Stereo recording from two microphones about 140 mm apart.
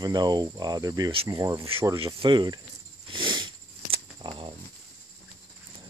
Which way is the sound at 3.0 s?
35° right (ahead or behind).